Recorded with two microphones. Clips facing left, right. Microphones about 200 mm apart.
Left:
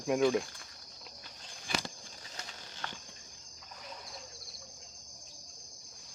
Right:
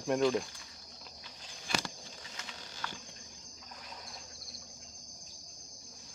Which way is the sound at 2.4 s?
40° left (ahead or behind).